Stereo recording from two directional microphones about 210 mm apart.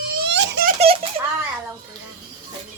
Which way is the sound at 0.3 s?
55° right (ahead or behind).